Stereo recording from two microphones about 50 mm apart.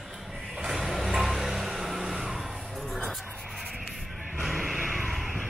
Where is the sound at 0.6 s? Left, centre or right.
Centre.